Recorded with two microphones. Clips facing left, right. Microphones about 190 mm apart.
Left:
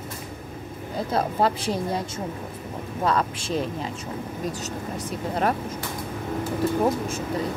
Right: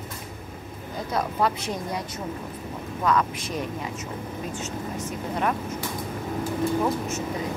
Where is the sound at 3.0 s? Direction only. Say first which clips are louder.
Even; 30° left (ahead or behind).